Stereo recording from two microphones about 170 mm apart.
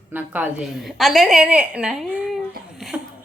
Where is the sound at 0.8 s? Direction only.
Centre (ahead or behind).